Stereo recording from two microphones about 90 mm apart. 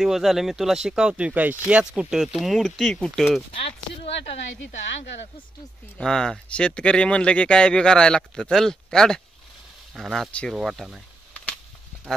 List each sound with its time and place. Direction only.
0.0 s speech: 5° right (ahead or behind)
3.5 s speech: 90° left
5.9 s speech: 5° left (ahead or behind)